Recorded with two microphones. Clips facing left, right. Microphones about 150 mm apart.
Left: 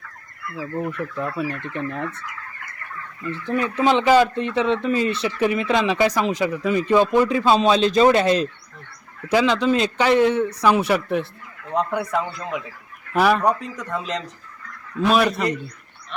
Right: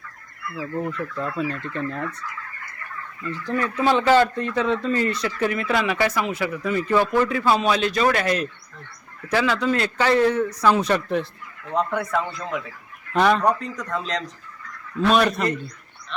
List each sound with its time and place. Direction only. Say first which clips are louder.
0.8 s speech: left 1 dB; 15° left (ahead or behind)
3.4 s speech: left 2 dB; 20° left (ahead or behind)